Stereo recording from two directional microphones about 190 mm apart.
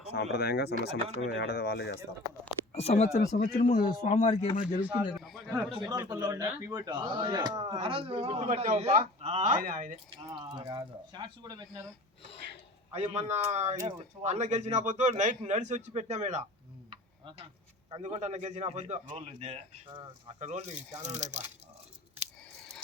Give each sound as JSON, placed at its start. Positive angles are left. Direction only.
{"t": 0.1, "sound": "speech", "side_deg": 60}
{"t": 2.7, "sound": "speech", "side_deg": 35}
{"t": 4.0, "sound": "speech", "side_deg": 35}
{"t": 4.9, "sound": "a man's voice", "side_deg": 0}
{"t": 5.8, "sound": "a man's voice", "side_deg": -20}
{"t": 10.2, "sound": "speech", "side_deg": -20}
{"t": 12.9, "sound": "a man's voice", "side_deg": -35}
{"t": 16.9, "sound": "tick-tock", "side_deg": -25}
{"t": 17.9, "sound": "a man's voice", "side_deg": -35}
{"t": 20.4, "sound": "a man's voice", "side_deg": -35}